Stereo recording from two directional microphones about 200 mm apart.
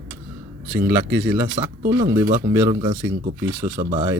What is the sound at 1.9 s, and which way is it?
Speech, 15° right (ahead or behind).